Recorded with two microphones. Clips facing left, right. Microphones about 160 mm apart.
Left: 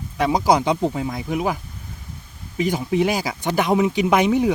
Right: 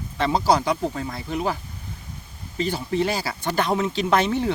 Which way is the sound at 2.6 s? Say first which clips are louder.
Left 4 dB; 15° left (ahead or behind).